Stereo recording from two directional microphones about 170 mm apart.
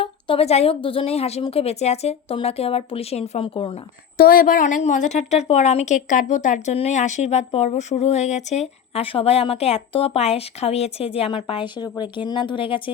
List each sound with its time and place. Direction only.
0.0 s a woman's voice: 35° left (ahead or behind)
4.2 s a woman's voice: 55° left (ahead or behind); by 12.8 s 30° left (ahead or behind)